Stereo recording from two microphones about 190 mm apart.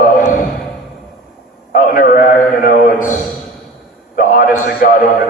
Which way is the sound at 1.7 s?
50° left (ahead or behind).